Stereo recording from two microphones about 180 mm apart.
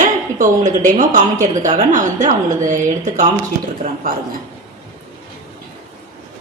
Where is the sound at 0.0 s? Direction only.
45° right (ahead or behind).